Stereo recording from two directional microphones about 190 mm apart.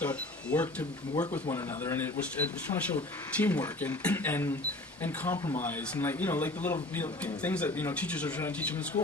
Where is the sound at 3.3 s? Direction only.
10° left (ahead or behind).